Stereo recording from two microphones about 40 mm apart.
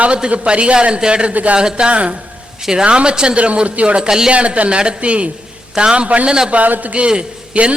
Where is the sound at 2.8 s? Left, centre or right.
Right.